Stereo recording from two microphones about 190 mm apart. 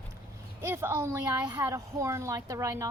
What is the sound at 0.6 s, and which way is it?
Speech, 10° right (ahead or behind).